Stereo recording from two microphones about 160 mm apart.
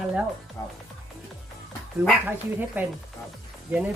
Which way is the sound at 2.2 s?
10° right (ahead or behind).